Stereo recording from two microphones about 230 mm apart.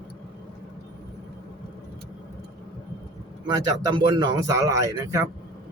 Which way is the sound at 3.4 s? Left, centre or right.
Centre.